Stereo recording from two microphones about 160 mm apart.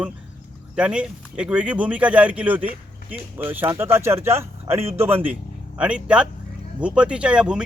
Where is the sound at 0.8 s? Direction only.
5° right (ahead or behind).